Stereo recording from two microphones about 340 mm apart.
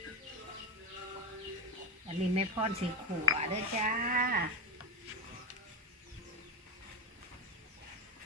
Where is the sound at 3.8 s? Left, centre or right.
Right.